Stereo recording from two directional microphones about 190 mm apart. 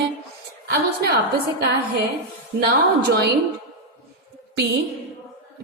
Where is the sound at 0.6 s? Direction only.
55° right (ahead or behind).